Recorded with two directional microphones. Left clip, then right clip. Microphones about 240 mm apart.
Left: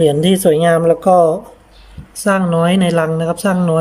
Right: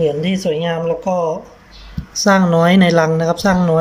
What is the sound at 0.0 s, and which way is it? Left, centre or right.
Speech, left.